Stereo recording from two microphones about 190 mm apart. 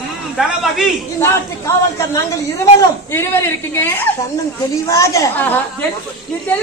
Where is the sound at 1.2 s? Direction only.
15° left (ahead or behind).